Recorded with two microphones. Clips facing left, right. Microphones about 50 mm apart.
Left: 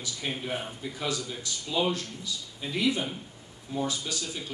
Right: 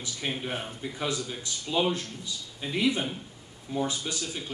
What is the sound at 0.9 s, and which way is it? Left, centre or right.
A man's voice, right.